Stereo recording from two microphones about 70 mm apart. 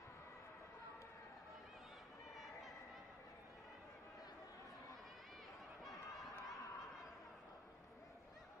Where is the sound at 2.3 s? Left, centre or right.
Centre.